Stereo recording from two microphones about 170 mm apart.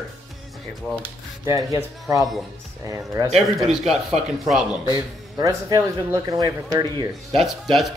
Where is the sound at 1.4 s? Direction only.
15° right (ahead or behind).